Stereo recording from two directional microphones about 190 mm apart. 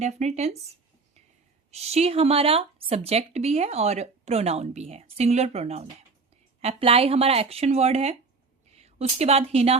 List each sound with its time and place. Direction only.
0.0 s speech: 35° right (ahead or behind)
1.7 s a woman's voice: 35° right (ahead or behind)